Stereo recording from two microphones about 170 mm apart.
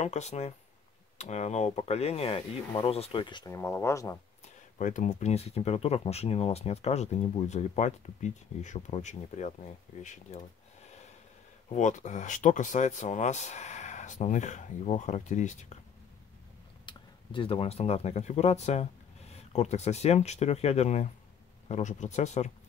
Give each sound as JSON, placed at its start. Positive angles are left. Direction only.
{"t": 0.0, "sound": "speech", "side_deg": 40}
{"t": 3.5, "sound": "speech", "side_deg": 15}
{"t": 4.7, "sound": "speech", "side_deg": 50}
{"t": 11.7, "sound": "speech", "side_deg": 45}
{"t": 16.8, "sound": "speech", "side_deg": 30}